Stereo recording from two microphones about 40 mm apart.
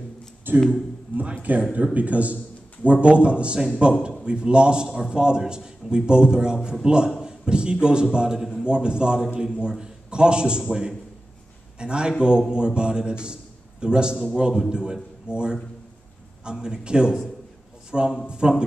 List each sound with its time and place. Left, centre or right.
0.5 s a sound: right
1.6 s a man's voice: right
4.8 s a man's voice: centre